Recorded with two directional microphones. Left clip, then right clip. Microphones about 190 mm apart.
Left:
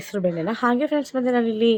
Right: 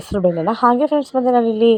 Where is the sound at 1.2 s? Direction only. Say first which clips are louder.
Right 7 dB; 25° left (ahead or behind).